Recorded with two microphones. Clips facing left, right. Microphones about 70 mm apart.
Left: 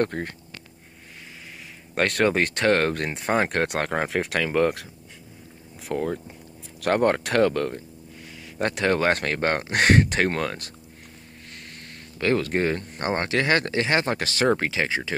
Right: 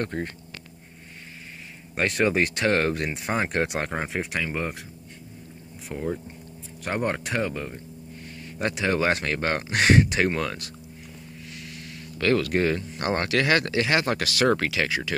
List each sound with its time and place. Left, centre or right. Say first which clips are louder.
0.0 s speech: left 4 dB; left
2.0 s speech: left 1 dB; left
5.9 s speech: left 3 dB; left
8.5 s speech: left 2 dB; left
12.2 s speech: even; left